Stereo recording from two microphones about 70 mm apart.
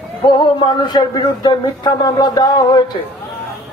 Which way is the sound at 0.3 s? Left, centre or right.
Left.